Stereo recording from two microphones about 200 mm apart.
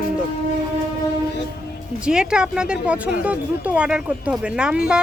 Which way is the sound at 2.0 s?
5° right (ahead or behind).